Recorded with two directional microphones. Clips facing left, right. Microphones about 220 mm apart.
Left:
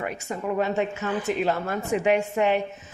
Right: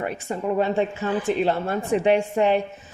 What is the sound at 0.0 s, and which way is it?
A woman's voice, 30° right (ahead or behind).